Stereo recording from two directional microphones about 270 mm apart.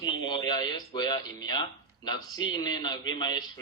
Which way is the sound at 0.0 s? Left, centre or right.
Centre.